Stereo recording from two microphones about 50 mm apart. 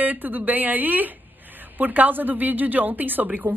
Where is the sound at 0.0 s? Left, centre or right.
Right.